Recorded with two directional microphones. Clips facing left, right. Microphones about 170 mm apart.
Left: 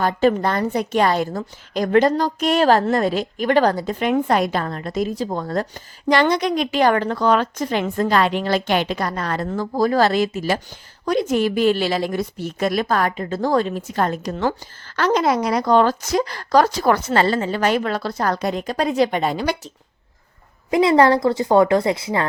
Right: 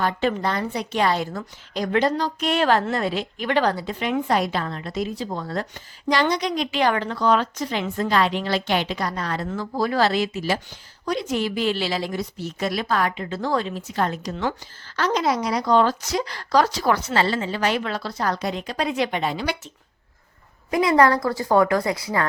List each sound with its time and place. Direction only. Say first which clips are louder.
0.0 s a woman's voice: left 5 dB; 40° left (ahead or behind)
20.7 s a woman's voice: left 3 dB; 25° left (ahead or behind)